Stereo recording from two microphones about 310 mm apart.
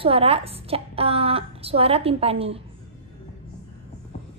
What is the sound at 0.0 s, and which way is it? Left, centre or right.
A woman's voice, centre.